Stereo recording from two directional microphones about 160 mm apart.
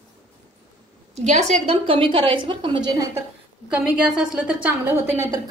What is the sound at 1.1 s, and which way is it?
A woman's voice, 45° right (ahead or behind).